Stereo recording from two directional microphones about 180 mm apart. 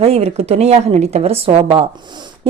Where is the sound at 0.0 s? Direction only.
35° right (ahead or behind).